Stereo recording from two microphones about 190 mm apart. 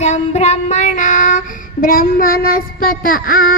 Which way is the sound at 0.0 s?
35° left (ahead or behind).